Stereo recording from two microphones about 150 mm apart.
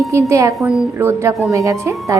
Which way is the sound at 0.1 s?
20° right (ahead or behind).